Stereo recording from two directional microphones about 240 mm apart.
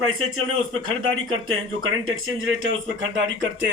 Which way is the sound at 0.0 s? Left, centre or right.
Right.